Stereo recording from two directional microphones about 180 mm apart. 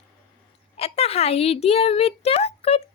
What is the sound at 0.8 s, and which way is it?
A woman's voice, 35° left (ahead or behind).